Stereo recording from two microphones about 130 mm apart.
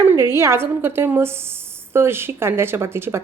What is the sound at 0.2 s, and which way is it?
A woman's voice, 20° right (ahead or behind).